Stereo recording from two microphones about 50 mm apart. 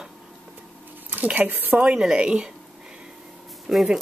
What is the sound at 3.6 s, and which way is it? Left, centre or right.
Speech, centre.